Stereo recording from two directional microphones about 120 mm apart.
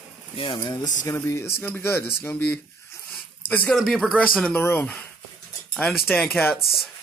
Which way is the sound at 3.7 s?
5° left (ahead or behind).